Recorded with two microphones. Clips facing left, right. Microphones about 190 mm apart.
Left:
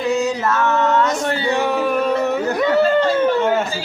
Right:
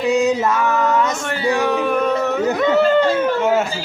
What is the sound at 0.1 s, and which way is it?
Mantra, 20° right (ahead or behind).